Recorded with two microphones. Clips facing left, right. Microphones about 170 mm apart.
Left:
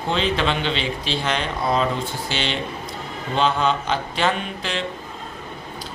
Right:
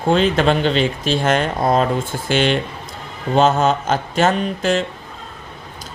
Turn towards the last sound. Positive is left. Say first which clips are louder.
# right 9 dB
turn(degrees=-45)  # may be behind; listen again after turning